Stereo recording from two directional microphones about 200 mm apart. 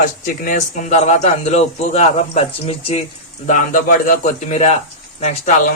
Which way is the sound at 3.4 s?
40° left (ahead or behind).